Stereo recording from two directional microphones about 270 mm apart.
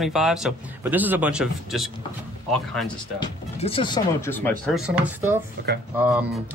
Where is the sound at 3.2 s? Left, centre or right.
Centre.